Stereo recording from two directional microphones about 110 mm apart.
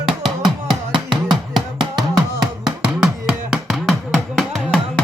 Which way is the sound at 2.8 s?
5° right (ahead or behind).